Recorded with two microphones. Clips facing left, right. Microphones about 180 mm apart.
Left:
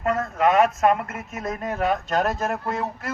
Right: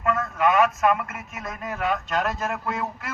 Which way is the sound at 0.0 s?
35° left (ahead or behind).